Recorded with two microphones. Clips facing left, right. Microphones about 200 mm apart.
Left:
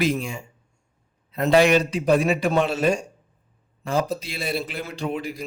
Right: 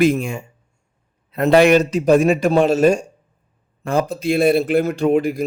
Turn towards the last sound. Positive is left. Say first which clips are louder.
# right 11 dB
turn(degrees=-50)  # may be behind; listen again after turning